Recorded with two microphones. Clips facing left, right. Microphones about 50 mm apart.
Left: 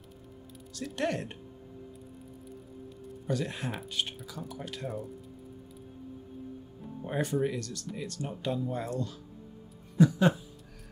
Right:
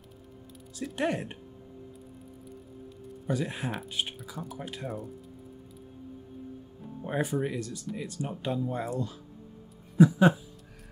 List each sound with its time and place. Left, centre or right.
0.7 s speech: centre
3.3 s speech: centre
4.4 s speech: centre
7.1 s speech: centre